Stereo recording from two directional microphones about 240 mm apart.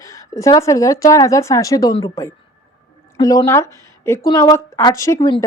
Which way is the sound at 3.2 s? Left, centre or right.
Centre.